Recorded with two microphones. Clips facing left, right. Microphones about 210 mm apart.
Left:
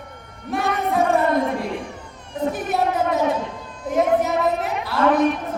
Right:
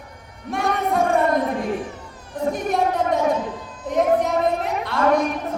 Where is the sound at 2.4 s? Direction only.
5° left (ahead or behind).